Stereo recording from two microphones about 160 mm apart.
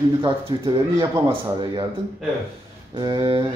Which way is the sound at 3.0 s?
25° right (ahead or behind).